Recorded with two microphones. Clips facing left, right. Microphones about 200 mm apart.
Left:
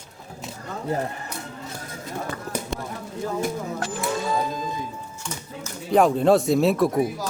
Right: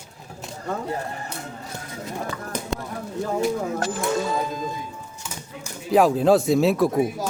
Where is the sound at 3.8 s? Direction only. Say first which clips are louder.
Right 3 dB; 40° right (ahead or behind).